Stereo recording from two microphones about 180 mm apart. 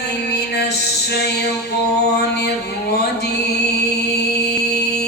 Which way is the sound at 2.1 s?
65° left (ahead or behind).